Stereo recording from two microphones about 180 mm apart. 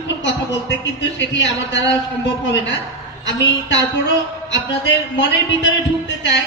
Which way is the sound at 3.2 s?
85° left.